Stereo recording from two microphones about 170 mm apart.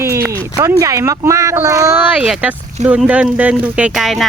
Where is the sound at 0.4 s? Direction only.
20° right (ahead or behind).